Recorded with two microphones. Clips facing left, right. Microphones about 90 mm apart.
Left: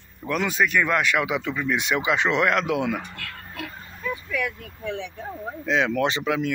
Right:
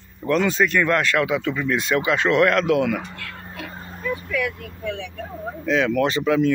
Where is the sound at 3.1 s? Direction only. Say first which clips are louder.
Right 2 dB; 25° right (ahead or behind); by 4.3 s 50° right (ahead or behind).